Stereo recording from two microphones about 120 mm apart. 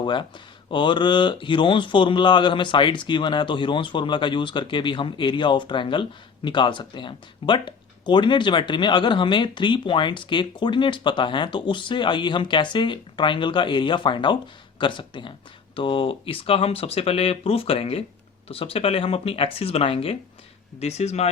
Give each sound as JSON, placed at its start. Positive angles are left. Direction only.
{"t": 0.0, "sound": "speech", "side_deg": 40}
{"t": 20.7, "sound": "speech", "side_deg": 60}